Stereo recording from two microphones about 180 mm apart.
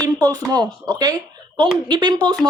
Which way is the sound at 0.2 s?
20° right (ahead or behind).